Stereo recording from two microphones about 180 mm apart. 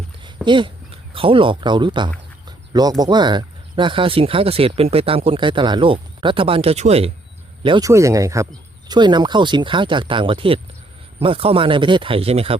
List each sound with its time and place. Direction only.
0.4 s speech: 25° right (ahead or behind)
7.6 s speech: 25° right (ahead or behind)